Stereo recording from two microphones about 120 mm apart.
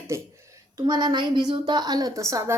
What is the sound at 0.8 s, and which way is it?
Speech, 40° right (ahead or behind).